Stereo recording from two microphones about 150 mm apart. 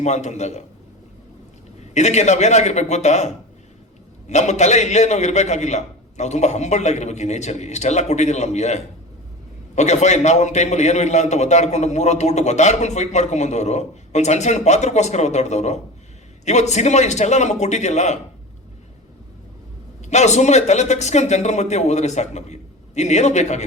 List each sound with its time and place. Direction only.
0.0 s a man's voice: 50° left (ahead or behind)
1.9 s a man's voice: 50° left (ahead or behind)
20.1 s a man's voice: 50° left (ahead or behind)